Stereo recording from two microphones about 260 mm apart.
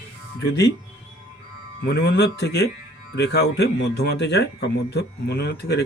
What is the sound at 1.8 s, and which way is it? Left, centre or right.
Speech, left.